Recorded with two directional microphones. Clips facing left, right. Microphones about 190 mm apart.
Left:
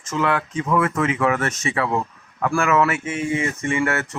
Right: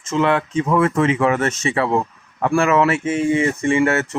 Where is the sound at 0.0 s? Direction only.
25° right (ahead or behind).